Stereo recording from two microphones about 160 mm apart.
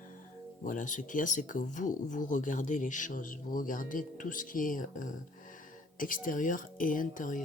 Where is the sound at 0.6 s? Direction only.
55° left (ahead or behind).